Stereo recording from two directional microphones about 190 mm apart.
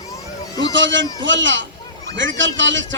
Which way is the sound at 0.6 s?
75° right (ahead or behind).